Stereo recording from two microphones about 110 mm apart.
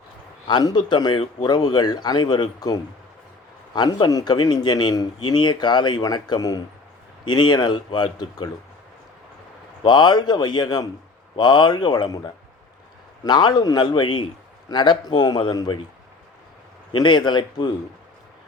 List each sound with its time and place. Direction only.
0.4 s speech: 45° left (ahead or behind)
4.1 s speech: 40° left (ahead or behind)
9.8 s speech: 40° left (ahead or behind)
16.9 s speech: 45° left (ahead or behind)